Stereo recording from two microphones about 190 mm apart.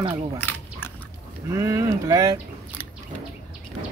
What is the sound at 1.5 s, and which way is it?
Speech, 15° right (ahead or behind).